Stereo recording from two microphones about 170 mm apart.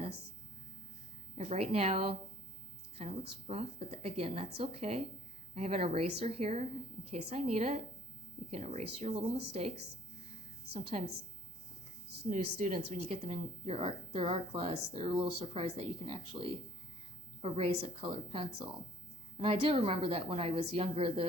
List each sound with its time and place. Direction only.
1.4 s speech: 40° right (ahead or behind)
12.3 s a woman's voice: 50° right (ahead or behind)
13.1 s speech: 35° right (ahead or behind)